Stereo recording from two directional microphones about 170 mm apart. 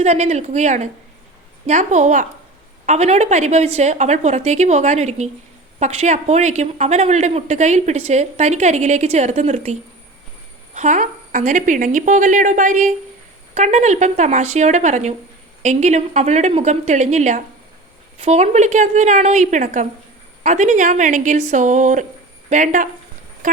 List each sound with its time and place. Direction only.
0.0 s a woman's voice: 40° right (ahead or behind)
10.8 s a woman's voice: 45° right (ahead or behind)